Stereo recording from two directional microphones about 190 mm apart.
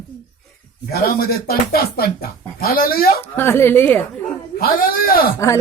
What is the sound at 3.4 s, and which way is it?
Speech, 10° left (ahead or behind).